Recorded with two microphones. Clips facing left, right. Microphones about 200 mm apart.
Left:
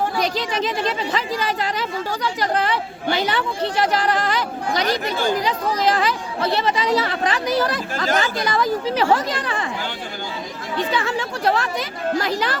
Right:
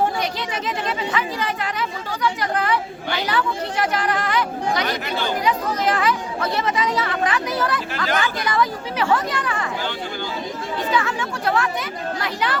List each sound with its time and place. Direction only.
1.1 s speech: 35° left (ahead or behind)
10.9 s speech: 35° left (ahead or behind)